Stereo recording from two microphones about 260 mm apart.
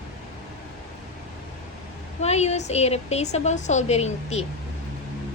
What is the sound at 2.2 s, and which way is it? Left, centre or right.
A woman's voice, left.